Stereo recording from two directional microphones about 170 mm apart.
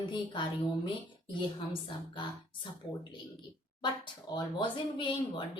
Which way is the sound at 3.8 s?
25° left (ahead or behind).